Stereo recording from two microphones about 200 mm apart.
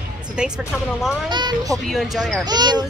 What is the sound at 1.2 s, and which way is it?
Speech, 20° right (ahead or behind).